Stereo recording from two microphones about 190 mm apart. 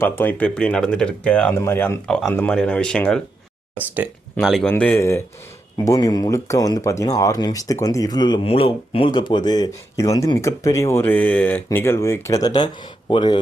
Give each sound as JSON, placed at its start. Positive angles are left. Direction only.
{"t": 0.0, "sound": "speech", "side_deg": 10}
{"t": 3.8, "sound": "speech", "side_deg": -10}